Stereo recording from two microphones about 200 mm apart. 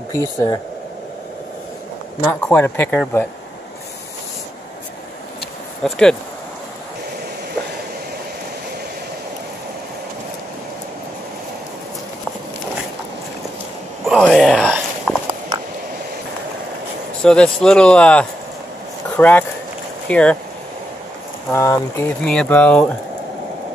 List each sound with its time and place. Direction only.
0.1 s speech: 15° left (ahead or behind)
2.2 s speech: 10° left (ahead or behind)
5.9 s speech: 5° left (ahead or behind)
14.0 s walk: centre (ahead or behind)
17.2 s speech: 5° left (ahead or behind)
21.5 s speech: 10° left (ahead or behind)